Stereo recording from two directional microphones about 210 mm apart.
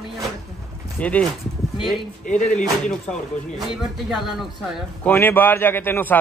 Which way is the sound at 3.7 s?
Centre (ahead or behind).